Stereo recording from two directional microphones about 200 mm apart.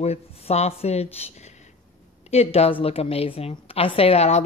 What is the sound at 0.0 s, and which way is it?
A woman's voice, 30° left (ahead or behind).